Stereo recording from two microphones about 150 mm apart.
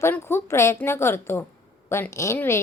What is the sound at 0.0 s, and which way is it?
A woman's voice, 15° left (ahead or behind).